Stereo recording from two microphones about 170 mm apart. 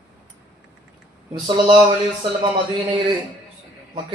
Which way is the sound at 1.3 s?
30° right (ahead or behind).